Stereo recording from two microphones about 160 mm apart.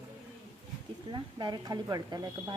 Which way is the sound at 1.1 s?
25° right (ahead or behind).